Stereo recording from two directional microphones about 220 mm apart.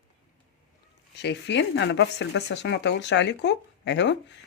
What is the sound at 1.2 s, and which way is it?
Speech, 50° left (ahead or behind).